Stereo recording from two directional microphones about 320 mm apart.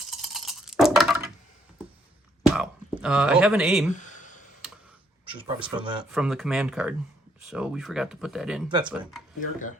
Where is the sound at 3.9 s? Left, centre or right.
Left.